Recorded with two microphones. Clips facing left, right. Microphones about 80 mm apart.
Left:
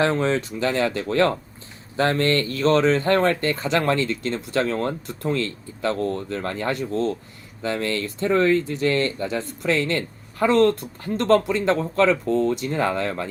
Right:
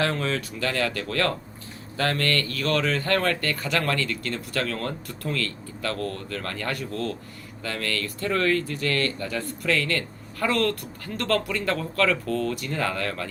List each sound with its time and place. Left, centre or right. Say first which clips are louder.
0.0 s speech: left 5 dB; left